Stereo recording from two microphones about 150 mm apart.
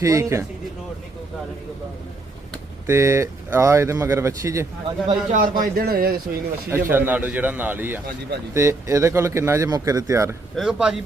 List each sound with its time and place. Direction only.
0.0 s speech: 20° right (ahead or behind)
2.8 s speech: 20° right (ahead or behind)
5.0 s a man's voice: 65° right (ahead or behind); by 6.1 s 85° right
6.7 s a man's voice: 15° right (ahead or behind)
10.5 s speech: 5° right (ahead or behind)